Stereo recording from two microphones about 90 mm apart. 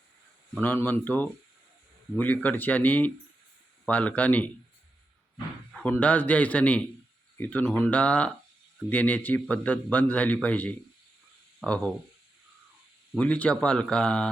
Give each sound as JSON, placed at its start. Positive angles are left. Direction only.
{"t": 0.6, "sound": "a man's voice", "side_deg": 20}
{"t": 5.7, "sound": "a man's voice", "side_deg": 15}
{"t": 13.1, "sound": "a man's voice", "side_deg": 15}